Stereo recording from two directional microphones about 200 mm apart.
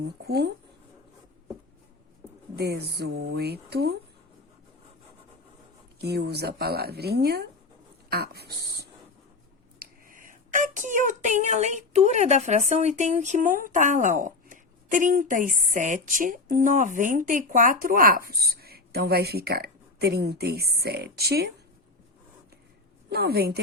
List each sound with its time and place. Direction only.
0.0 s speech: 55° right (ahead or behind)
2.6 s speech: 55° right (ahead or behind)
6.0 s a woman's voice: 55° right (ahead or behind)
9.7 s a woman's voice: 45° right (ahead or behind)
23.0 s a woman's voice: 55° right (ahead or behind)